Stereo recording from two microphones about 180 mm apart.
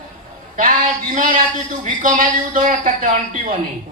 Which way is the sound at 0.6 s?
50° right (ahead or behind).